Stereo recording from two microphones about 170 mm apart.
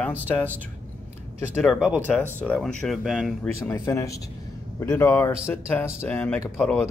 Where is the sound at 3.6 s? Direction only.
15° left (ahead or behind).